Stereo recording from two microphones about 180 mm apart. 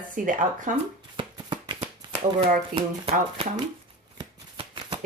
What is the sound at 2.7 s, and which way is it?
Speech, 35° right (ahead or behind).